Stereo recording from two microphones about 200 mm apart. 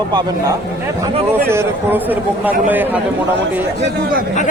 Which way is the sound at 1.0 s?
15° right (ahead or behind).